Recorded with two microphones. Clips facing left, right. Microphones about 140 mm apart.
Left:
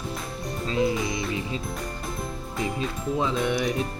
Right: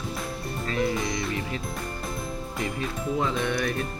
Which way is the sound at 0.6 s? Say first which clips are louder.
Left 2 dB; 20° left (ahead or behind).